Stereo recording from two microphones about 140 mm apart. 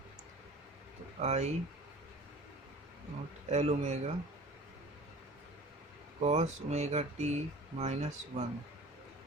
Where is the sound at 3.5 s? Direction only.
50° right (ahead or behind).